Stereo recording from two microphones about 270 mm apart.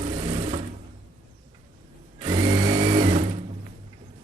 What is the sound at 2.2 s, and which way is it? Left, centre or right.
Sewing machine, centre.